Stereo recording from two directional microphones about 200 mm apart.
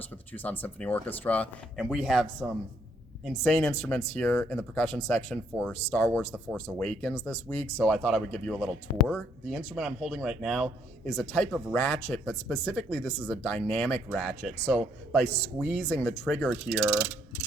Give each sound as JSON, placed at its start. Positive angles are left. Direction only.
{"t": 0.0, "sound": "speech", "side_deg": 10}